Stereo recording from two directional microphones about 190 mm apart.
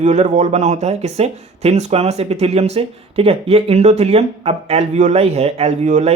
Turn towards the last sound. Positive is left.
turn(degrees=-35)  # may be behind; listen again after turning